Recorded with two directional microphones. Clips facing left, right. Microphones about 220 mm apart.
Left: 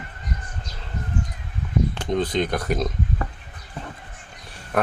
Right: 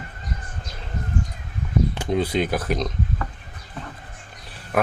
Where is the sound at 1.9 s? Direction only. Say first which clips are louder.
Even; 10° right (ahead or behind).